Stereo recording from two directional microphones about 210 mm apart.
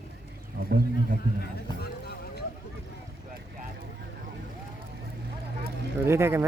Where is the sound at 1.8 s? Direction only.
50° left (ahead or behind).